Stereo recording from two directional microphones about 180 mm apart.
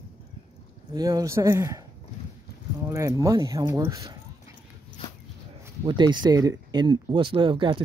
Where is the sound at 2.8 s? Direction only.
15° right (ahead or behind).